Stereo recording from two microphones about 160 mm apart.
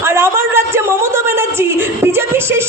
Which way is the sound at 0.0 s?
15° right (ahead or behind).